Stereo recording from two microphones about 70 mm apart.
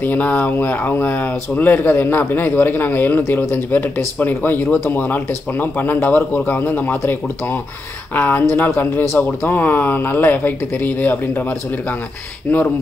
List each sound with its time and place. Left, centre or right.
0.0 s speech: left